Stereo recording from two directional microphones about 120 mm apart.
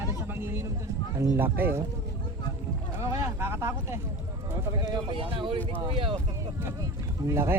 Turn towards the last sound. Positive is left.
turn(degrees=-20)  # may be behind; listen again after turning